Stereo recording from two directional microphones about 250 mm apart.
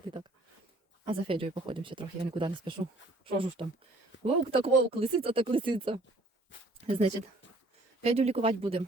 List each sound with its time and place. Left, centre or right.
1.0 s speech: right